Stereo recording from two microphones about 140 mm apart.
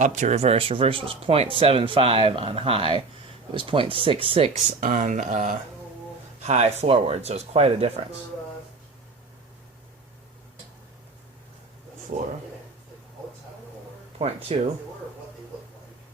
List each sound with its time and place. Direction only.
0.0 s speech: 55° right (ahead or behind)
4.8 s speech: 80° right; by 5.5 s 65° right (ahead or behind)
6.4 s speech: 50° right (ahead or behind)
12.1 s speech: 70° right (ahead or behind)
14.2 s speech: 45° right (ahead or behind)